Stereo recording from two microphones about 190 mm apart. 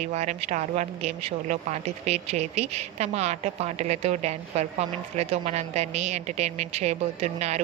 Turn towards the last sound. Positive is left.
turn(degrees=-35)  # may be behind; listen again after turning